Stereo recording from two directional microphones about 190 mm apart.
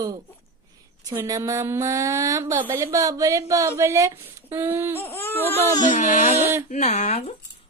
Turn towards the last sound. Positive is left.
turn(degrees=35)  # may be behind; listen again after turning